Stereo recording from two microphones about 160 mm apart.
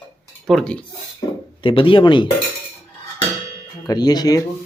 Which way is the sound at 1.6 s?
35° left (ahead or behind).